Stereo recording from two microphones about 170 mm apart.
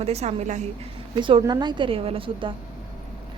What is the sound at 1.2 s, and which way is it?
A woman's voice, 30° right (ahead or behind).